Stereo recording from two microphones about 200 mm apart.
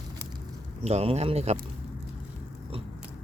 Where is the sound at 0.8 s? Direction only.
30° right (ahead or behind).